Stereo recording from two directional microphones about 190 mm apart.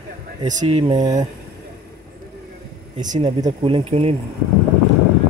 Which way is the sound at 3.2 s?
20° right (ahead or behind).